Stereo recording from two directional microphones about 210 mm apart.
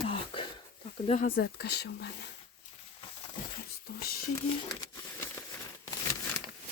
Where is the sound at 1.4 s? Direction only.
50° left (ahead or behind).